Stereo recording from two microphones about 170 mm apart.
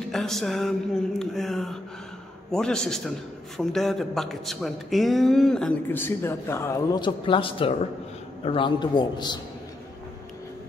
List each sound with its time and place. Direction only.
0.1 s a man's voice: centre (ahead or behind); by 9.4 s 25° left (ahead or behind)